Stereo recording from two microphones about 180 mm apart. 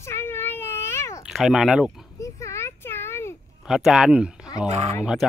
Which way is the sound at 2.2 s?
15° left (ahead or behind).